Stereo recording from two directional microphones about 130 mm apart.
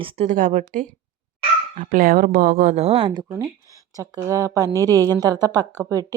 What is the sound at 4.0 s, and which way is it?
Speech, 25° right (ahead or behind).